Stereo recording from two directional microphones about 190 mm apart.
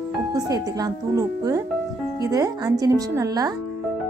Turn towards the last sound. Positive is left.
turn(degrees=-20)  # may be behind; listen again after turning